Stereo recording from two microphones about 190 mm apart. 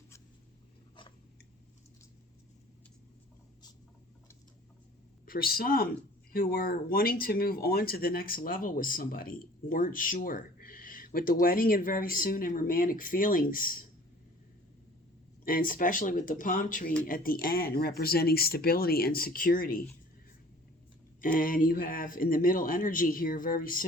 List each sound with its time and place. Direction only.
5.2 s speech: 50° left (ahead or behind)
15.4 s speech: 45° left (ahead or behind)
21.2 s speech: 45° left (ahead or behind)